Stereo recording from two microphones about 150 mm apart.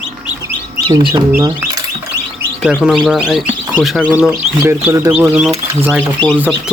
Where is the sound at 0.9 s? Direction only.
30° right (ahead or behind).